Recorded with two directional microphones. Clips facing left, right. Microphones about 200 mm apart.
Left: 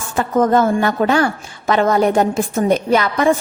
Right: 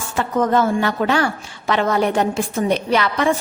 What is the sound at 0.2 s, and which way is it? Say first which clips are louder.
A woman's voice: left 3 dB; 45° left (ahead or behind).